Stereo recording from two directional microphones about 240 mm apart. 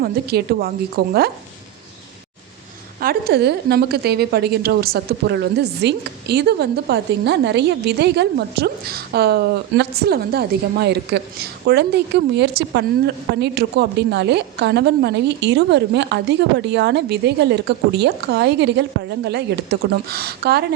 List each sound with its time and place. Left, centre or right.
0.0 s a woman's voice: right
3.0 s a woman's voice: right